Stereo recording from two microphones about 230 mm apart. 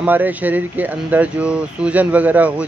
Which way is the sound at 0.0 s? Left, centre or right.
Centre.